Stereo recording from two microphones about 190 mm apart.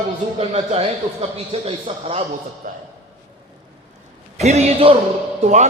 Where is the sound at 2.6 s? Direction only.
45° right (ahead or behind).